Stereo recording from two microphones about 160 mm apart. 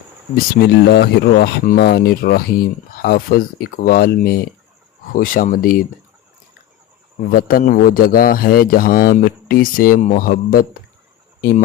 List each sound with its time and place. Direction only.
0.3 s a man's voice: 80° left; by 5.8 s 60° left (ahead or behind)
7.3 s a man's voice: 65° left (ahead or behind)